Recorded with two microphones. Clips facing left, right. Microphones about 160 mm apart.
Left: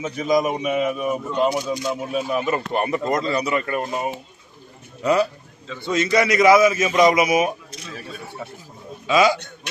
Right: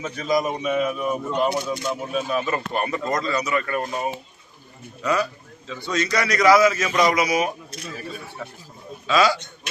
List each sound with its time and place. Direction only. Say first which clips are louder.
0.0 s a man's voice: left 3 dB; 20° left (ahead or behind)
5.0 s a man's voice: left 4 dB; 25° left (ahead or behind)